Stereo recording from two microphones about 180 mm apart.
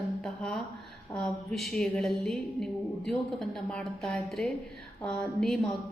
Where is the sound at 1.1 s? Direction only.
Centre (ahead or behind).